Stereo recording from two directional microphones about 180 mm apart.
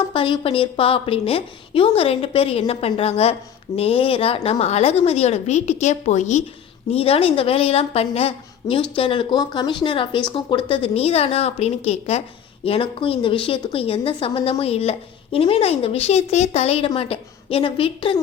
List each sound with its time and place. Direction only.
0.1 s a woman's voice: 30° left (ahead or behind)